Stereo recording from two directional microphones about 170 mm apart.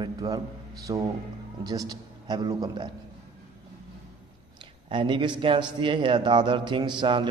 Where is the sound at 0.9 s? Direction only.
25° right (ahead or behind).